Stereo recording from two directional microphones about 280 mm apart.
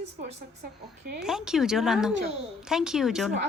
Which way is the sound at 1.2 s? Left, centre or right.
Centre.